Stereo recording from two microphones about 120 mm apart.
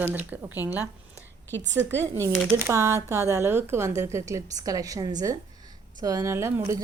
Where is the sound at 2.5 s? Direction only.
20° right (ahead or behind).